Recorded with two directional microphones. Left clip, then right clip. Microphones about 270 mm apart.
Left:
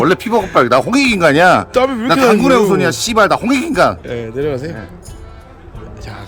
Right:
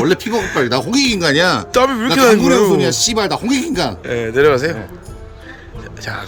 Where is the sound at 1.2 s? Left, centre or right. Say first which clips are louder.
Left 8 dB; left.